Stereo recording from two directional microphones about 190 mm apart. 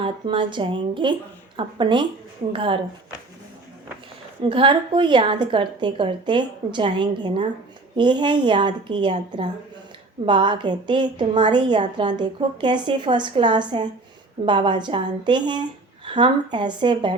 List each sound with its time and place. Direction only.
0.0 s a woman's voice: 25° right (ahead or behind)
4.4 s a woman's voice: 25° right (ahead or behind)